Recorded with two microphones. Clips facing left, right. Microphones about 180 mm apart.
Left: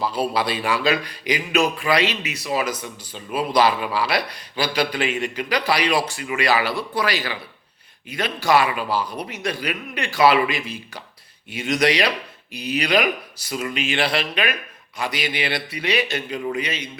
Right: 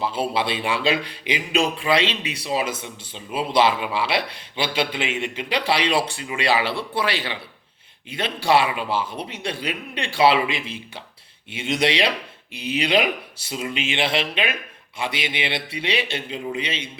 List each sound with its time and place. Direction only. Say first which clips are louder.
0.0 s a man's voice: left 1 dB; 25° right (ahead or behind)